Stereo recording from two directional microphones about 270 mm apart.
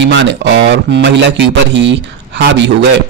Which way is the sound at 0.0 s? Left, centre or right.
Right.